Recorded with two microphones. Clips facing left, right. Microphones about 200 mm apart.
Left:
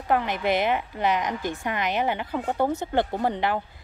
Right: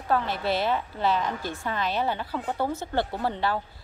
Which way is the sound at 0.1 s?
15° left (ahead or behind).